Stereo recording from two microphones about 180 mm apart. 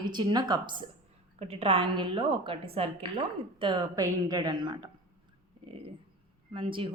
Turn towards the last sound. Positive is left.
turn(degrees=-30)  # may be behind; listen again after turning